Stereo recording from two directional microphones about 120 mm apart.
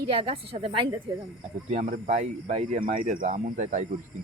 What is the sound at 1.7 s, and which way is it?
Speech, 75° right (ahead or behind).